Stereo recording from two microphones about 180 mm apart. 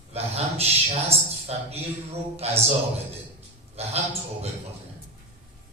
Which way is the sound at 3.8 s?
35° right (ahead or behind).